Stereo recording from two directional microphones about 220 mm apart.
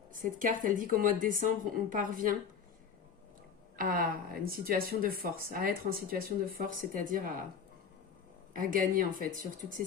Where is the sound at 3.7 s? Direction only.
40° right (ahead or behind).